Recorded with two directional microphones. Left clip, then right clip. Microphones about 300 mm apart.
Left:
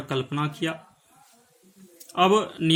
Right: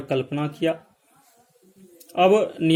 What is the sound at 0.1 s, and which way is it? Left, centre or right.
Speech, centre.